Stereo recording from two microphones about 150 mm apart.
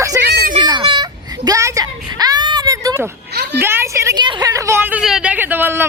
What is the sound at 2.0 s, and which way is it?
Baby cry, 25° right (ahead or behind).